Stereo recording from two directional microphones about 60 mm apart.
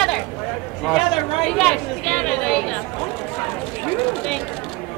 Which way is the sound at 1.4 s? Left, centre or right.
Centre.